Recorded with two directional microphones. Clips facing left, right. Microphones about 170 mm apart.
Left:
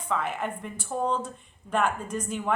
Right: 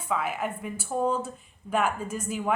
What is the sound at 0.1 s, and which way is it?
A woman's voice, 5° right (ahead or behind).